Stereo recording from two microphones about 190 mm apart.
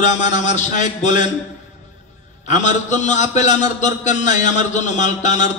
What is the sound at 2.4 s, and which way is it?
A man's voice, 40° left (ahead or behind).